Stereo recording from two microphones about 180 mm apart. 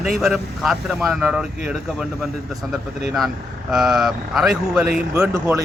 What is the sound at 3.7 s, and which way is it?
Speech, centre (ahead or behind).